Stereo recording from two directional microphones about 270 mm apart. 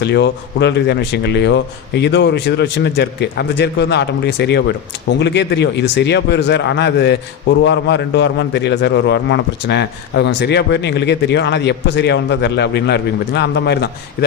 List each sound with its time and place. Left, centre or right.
0.0 s a man's voice: left